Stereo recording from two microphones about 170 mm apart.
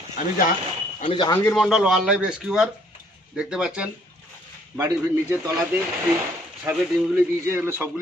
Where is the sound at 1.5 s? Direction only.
Centre (ahead or behind).